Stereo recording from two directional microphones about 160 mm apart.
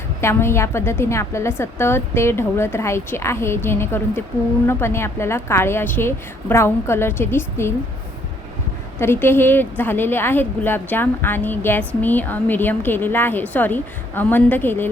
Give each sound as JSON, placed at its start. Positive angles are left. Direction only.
{"t": 0.2, "sound": "a woman's voice", "side_deg": 15}
{"t": 9.0, "sound": "a woman's voice", "side_deg": 15}